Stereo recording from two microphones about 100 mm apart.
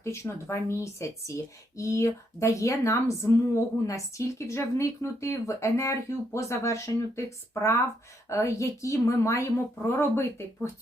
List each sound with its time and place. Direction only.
0.0 s a woman's voice: 30° left (ahead or behind)